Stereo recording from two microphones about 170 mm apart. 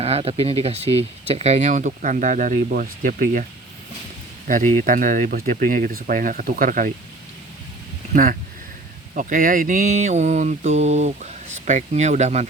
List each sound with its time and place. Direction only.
0.0 s speech: 35° right (ahead or behind); by 3.4 s 55° right (ahead or behind)
4.8 s speech: 50° right (ahead or behind)
8.1 s speech: 55° right (ahead or behind)